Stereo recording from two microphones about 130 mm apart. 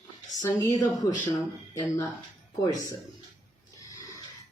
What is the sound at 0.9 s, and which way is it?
Speech, 25° left (ahead or behind).